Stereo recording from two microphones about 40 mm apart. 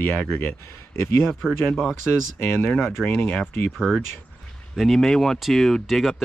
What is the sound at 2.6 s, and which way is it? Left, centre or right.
Speech, left.